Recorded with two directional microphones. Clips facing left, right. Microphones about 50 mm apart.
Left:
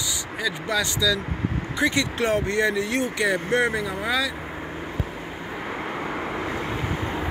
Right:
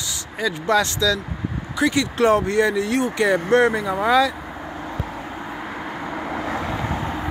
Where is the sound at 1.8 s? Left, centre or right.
Left.